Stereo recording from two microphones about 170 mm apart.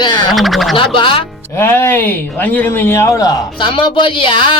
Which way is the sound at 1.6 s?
15° left (ahead or behind).